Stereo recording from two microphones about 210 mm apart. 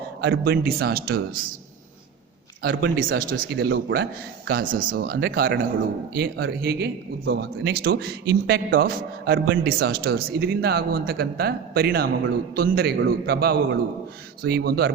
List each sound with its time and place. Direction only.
0.2 s a man's voice: 50° right (ahead or behind)
2.7 s a man's voice: 45° right (ahead or behind)
5.1 s a man's voice: 50° right (ahead or behind)